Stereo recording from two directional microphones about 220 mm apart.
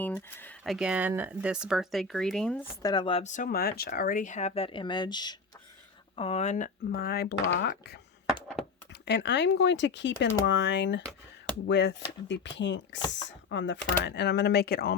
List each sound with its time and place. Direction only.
0.0 s speech: 10° left (ahead or behind)
2.8 s speech: 20° left (ahead or behind); by 7.3 s 45° left (ahead or behind)
7.4 s speech: 60° left (ahead or behind)
8.9 s speech: 50° left (ahead or behind)